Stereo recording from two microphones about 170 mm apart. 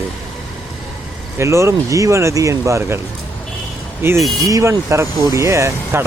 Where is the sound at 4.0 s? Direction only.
15° right (ahead or behind).